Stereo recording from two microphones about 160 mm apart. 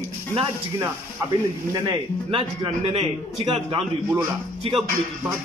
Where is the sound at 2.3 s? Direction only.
35° right (ahead or behind).